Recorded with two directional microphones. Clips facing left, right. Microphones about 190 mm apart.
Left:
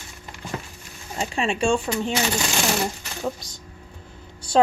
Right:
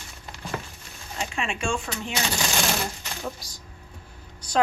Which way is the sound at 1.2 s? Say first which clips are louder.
Left 6 dB; 35° left (ahead or behind).